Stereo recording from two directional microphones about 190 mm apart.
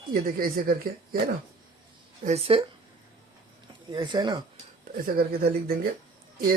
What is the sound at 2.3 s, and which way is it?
Speech, 30° right (ahead or behind).